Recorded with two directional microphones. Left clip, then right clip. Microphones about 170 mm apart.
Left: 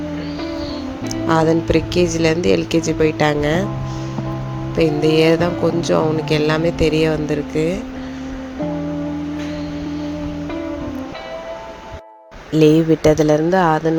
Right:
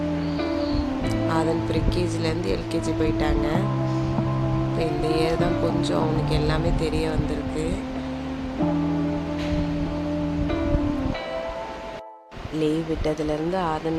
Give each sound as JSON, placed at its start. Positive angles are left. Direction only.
{"t": 1.3, "sound": "music", "side_deg": 40}
{"t": 4.8, "sound": "music", "side_deg": 40}
{"t": 12.5, "sound": "music", "side_deg": 45}